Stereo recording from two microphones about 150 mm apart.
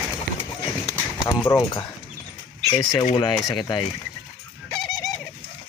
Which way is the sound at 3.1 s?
30° left (ahead or behind).